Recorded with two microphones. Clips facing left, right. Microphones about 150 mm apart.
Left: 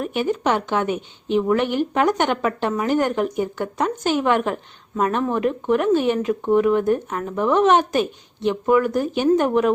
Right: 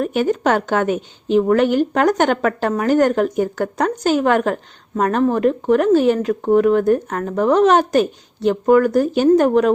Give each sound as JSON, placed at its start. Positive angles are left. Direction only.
{"t": 0.0, "sound": "a woman's voice", "side_deg": -45}